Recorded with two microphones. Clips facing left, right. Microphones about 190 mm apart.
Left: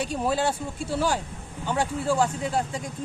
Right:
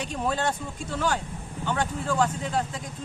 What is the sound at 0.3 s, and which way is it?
Speech, 10° left (ahead or behind).